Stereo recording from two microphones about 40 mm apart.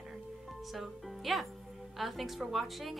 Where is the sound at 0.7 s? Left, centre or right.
Centre.